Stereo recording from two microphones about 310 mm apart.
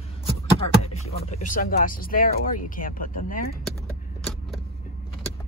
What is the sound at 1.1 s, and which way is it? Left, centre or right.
Speech, left.